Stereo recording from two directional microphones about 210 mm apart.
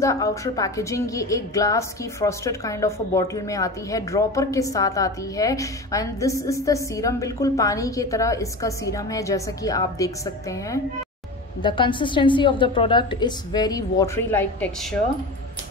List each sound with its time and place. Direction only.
0.0 s a woman's voice: 15° left (ahead or behind)